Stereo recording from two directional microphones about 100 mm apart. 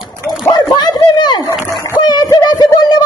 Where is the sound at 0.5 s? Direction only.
45° left (ahead or behind).